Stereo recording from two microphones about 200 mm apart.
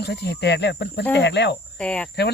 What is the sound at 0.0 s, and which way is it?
Speech, 55° left (ahead or behind).